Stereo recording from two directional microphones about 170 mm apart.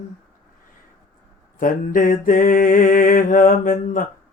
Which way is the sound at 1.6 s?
55° left (ahead or behind).